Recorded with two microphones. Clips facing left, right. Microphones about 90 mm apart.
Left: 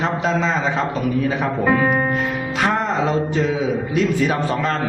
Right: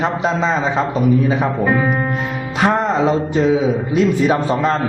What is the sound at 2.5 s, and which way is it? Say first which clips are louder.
A man's voice: right 5 dB; 25° right (ahead or behind).